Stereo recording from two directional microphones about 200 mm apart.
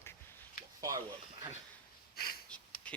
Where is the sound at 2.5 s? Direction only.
5° left (ahead or behind).